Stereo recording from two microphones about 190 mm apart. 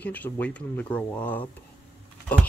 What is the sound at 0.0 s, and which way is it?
Speech, 10° left (ahead or behind).